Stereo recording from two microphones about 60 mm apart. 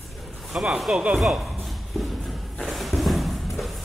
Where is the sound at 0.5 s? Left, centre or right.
Centre.